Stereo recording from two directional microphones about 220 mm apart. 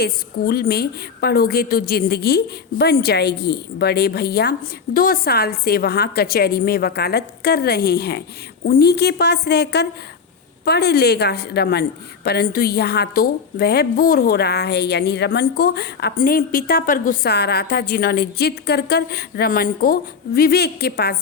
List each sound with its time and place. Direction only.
0.0 s a woman's voice: 45° left (ahead or behind)